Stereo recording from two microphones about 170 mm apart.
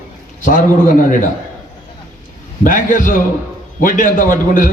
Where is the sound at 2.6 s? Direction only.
55° left (ahead or behind).